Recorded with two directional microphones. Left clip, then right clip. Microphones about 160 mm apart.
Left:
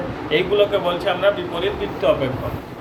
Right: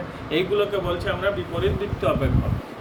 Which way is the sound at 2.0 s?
30° right (ahead or behind).